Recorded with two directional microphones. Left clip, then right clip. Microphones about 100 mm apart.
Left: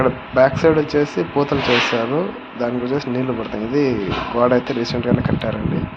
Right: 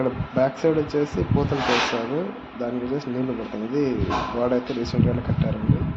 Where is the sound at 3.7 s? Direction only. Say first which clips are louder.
Left 5 dB; 25° left (ahead or behind).